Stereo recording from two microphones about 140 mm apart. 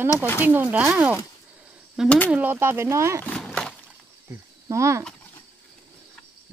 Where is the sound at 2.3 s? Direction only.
15° right (ahead or behind).